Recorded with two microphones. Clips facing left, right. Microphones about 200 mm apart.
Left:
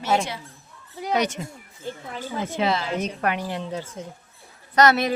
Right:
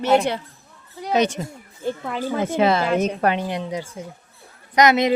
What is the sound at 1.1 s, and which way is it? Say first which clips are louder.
Speech: right 4 dB; 25° right (ahead or behind).